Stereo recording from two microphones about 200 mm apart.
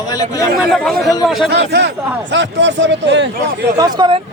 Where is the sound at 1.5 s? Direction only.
60° right (ahead or behind).